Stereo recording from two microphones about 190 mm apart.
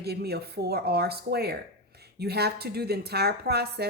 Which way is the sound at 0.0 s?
60° right (ahead or behind).